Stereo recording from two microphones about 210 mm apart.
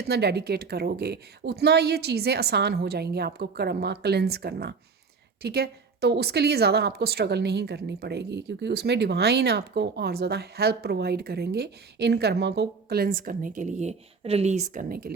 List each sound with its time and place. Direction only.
0.0 s a woman's voice: 50° right (ahead or behind)